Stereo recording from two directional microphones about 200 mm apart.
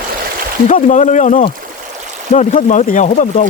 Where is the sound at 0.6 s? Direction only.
35° left (ahead or behind).